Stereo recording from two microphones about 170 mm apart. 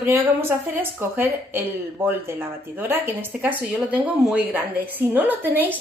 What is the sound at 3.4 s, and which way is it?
A woman's voice, 10° right (ahead or behind).